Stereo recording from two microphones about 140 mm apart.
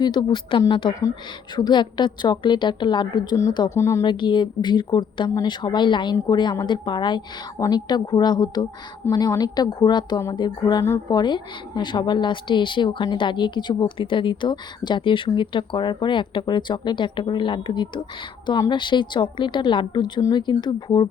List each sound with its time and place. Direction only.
0.0 s a woman's voice: 30° left (ahead or behind)
4.0 s a woman's voice: 35° left (ahead or behind)